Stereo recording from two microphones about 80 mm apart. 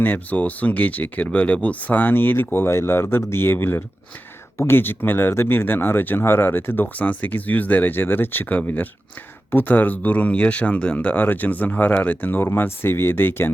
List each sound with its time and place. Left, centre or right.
0.0 s speech: left